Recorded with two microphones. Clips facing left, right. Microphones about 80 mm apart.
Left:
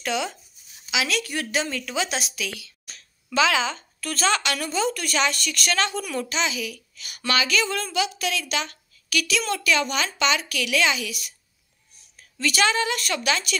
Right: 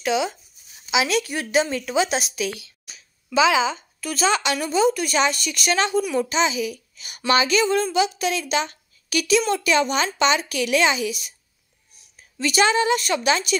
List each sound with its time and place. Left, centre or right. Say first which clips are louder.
0.0 s speech: right 5 dB; centre
0.8 s speech: right 5 dB; right
2.9 s speech: right 4 dB; centre